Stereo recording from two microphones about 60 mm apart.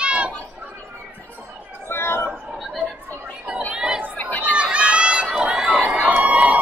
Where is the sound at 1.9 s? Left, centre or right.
Left.